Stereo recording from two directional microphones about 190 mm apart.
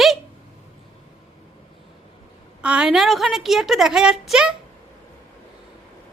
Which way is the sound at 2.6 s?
5° right (ahead or behind).